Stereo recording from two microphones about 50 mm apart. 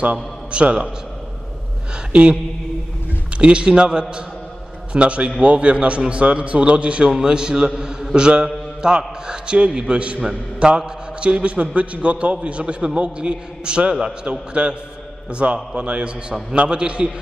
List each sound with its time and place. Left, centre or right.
0.0 s a man's voice: right
3.3 s a man's voice: right